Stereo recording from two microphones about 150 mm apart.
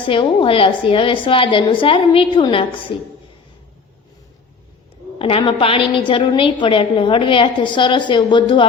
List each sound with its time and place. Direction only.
0.1 s a woman's voice: 35° left (ahead or behind)
5.2 s a woman's voice: 35° left (ahead or behind)